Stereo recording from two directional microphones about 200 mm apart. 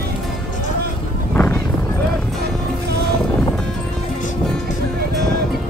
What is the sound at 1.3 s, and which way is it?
Clip-clop, 10° left (ahead or behind).